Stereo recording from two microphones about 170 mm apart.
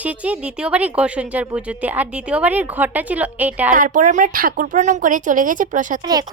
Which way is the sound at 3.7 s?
50° right (ahead or behind).